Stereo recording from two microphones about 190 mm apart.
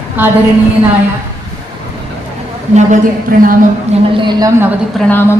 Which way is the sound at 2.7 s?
45° right (ahead or behind).